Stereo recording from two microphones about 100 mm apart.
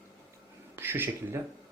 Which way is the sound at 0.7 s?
20° right (ahead or behind).